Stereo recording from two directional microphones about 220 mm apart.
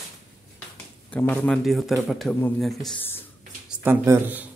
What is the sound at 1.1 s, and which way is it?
A man's voice, 5° left (ahead or behind).